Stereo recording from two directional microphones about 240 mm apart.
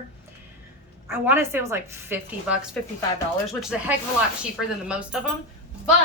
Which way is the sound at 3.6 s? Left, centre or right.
Centre.